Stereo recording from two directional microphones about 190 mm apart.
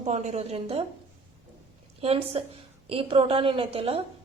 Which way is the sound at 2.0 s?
30° right (ahead or behind).